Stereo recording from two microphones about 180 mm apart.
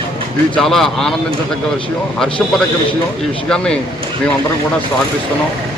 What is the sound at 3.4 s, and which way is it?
Speech, 5° left (ahead or behind).